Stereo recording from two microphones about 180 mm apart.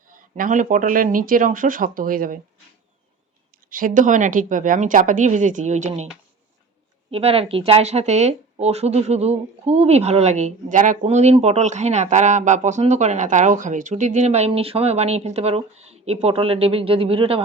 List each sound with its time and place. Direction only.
0.1 s speech: 50° right (ahead or behind)
3.7 s speech: 50° right (ahead or behind)
7.1 s speech: 35° right (ahead or behind)